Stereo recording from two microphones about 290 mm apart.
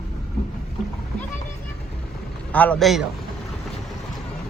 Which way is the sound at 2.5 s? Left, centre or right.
Centre.